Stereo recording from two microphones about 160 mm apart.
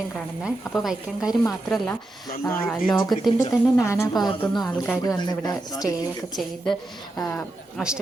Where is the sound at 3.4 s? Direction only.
20° left (ahead or behind).